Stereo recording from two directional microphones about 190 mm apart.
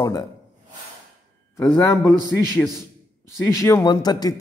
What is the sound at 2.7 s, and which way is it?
A man's voice, 15° left (ahead or behind).